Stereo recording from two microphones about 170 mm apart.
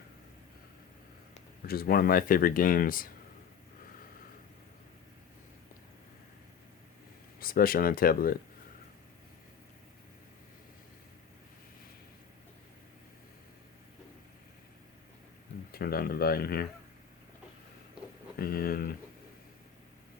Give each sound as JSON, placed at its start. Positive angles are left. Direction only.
{"t": 1.6, "sound": "speech", "side_deg": 60}
{"t": 7.3, "sound": "speech", "side_deg": 60}
{"t": 15.7, "sound": "speech", "side_deg": 65}
{"t": 18.3, "sound": "speech", "side_deg": 60}